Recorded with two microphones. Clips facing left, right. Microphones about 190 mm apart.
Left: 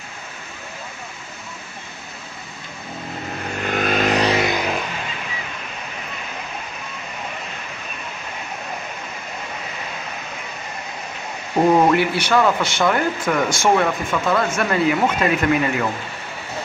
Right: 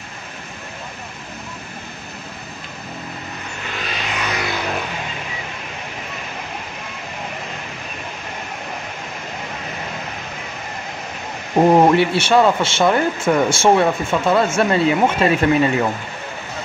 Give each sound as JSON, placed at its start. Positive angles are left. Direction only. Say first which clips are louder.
{"t": 3.6, "sound": "vehicle", "louder": "left 10 dB", "side_deg": 50}
{"t": 4.2, "sound": "vehicle", "louder": "left 6 dB", "side_deg": 30}
{"t": 11.5, "sound": "speech", "louder": "right 3 dB", "side_deg": -25}